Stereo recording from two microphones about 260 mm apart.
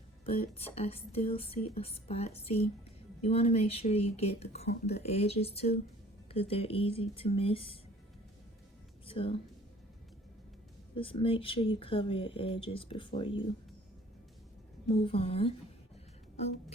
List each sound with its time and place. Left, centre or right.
0.3 s speech: left
9.0 s a woman's voice: left
10.9 s speech: centre
15.0 s speech: left